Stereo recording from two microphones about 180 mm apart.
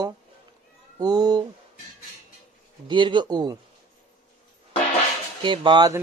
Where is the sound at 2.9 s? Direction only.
25° right (ahead or behind).